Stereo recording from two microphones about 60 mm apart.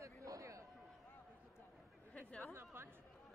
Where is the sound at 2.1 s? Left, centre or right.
Left.